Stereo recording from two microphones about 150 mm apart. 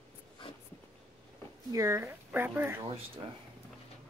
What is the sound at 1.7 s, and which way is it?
Speech, 20° right (ahead or behind).